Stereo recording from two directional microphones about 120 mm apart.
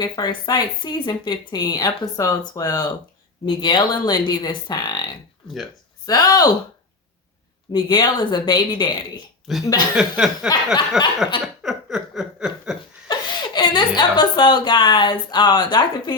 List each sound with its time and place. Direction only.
0.0 s speech: 35° left (ahead or behind)
6.1 s speech: 35° left (ahead or behind)
7.7 s speech: 40° left (ahead or behind)
9.5 s a sound: centre (ahead or behind)
11.6 s chuckle: 5° right (ahead or behind)
13.1 s a woman's voice: 40° left (ahead or behind)